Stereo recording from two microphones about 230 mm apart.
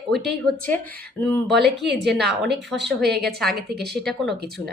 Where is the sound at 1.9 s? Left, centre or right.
Centre.